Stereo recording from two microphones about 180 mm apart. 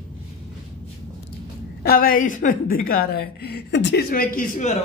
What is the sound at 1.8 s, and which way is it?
A woman's voice, 55° left (ahead or behind).